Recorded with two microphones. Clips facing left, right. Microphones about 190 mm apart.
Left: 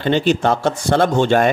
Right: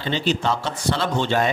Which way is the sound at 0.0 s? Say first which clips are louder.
Left 7 dB; 55° left (ahead or behind).